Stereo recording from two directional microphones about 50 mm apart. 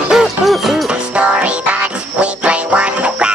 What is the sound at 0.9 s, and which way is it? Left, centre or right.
Music, right.